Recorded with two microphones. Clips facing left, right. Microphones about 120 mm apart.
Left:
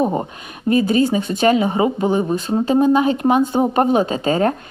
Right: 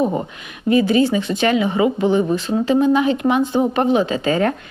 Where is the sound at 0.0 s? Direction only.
35° left (ahead or behind).